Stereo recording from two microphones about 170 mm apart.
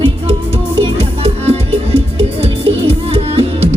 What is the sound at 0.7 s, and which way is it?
Music, 35° right (ahead or behind).